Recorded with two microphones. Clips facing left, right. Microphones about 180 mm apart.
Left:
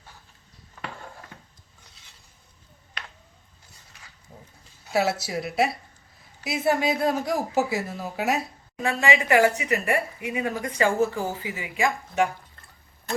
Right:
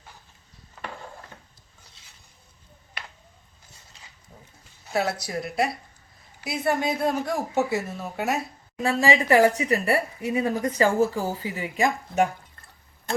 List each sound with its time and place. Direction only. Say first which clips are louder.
4.9 s speech: left 2 dB; 5° left (ahead or behind)
8.8 s speech: right 2 dB; 35° right (ahead or behind)